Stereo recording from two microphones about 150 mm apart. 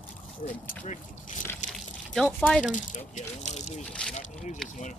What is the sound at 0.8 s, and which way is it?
Speech, 55° left (ahead or behind).